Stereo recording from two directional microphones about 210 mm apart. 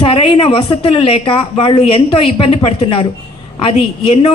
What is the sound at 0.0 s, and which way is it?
Speech, 25° left (ahead or behind).